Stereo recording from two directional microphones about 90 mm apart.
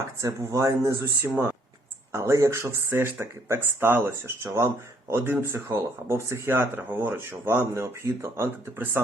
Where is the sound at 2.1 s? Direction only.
30° right (ahead or behind).